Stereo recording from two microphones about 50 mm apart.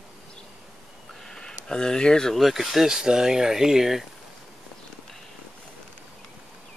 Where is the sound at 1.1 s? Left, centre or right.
Centre.